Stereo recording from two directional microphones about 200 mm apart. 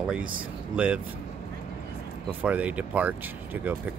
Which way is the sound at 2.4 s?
5° right (ahead or behind).